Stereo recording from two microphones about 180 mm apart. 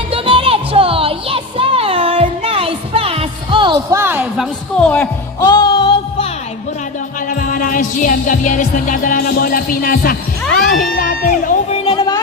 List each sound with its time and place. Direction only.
0.1 s music: 30° right (ahead or behind)
3.9 s a sound: 10° right (ahead or behind)
4.8 s speech: 10° left (ahead or behind)
5.4 s music: 25° left (ahead or behind)
7.3 s music: 50° left (ahead or behind)
10.4 s music: 5° left (ahead or behind)
11.0 s music: 50° left (ahead or behind)
11.7 s a sound: 25° left (ahead or behind)